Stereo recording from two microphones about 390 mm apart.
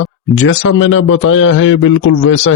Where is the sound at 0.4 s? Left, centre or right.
Left.